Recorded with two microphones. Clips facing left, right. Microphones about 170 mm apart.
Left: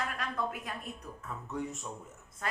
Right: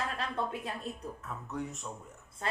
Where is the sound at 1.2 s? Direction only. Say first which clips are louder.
Left 3 dB; centre (ahead or behind).